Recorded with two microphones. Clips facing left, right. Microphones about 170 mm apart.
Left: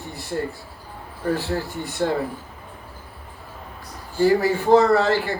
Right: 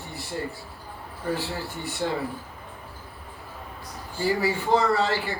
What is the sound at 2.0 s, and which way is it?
Speech, 60° left (ahead or behind).